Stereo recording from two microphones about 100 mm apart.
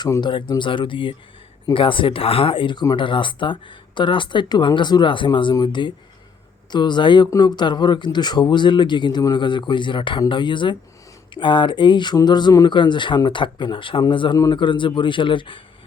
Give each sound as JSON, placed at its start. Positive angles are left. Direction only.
{"t": 0.2, "sound": "speech", "side_deg": 50}